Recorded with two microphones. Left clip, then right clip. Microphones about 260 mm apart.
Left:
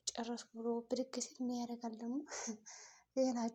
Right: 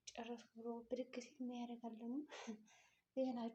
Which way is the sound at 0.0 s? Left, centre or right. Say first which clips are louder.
Left 8 dB; left.